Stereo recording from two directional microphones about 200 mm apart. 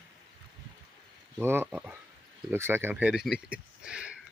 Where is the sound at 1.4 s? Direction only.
10° right (ahead or behind).